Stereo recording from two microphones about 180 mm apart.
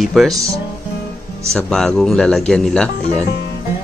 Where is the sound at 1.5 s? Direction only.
5° left (ahead or behind).